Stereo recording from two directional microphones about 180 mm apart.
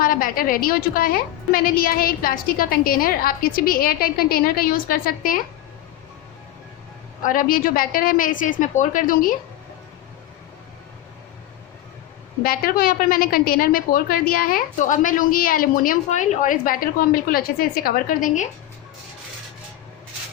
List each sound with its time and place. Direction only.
0.0 s a woman's voice: 50° left (ahead or behind)
7.2 s a woman's voice: 50° left (ahead or behind)
12.4 s a woman's voice: 55° left (ahead or behind)